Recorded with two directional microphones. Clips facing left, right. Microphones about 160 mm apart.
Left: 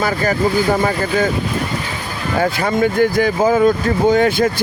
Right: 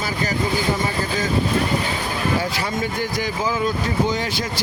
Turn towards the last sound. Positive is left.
turn(degrees=55)  # may be behind; listen again after turning